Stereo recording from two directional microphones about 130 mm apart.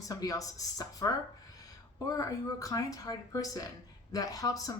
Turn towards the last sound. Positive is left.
turn(degrees=25)  # may be behind; listen again after turning